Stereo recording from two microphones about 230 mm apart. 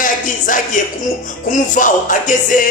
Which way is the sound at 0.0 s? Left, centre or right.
Left.